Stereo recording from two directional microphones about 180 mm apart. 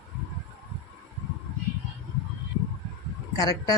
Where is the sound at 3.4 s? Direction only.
20° left (ahead or behind).